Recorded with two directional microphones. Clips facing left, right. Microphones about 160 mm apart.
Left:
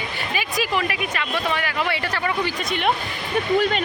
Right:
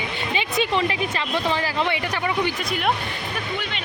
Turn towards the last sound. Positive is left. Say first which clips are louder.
# left 11 dB
turn(degrees=45)  # may be behind; listen again after turning